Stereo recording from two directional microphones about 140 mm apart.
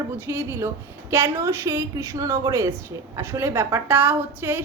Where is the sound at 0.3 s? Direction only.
20° right (ahead or behind).